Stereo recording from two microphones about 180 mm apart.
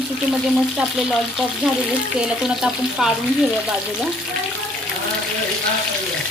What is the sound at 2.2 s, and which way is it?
Speech, 5° right (ahead or behind).